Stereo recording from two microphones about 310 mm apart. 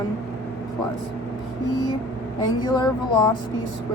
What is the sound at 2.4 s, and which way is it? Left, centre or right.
Speech, centre.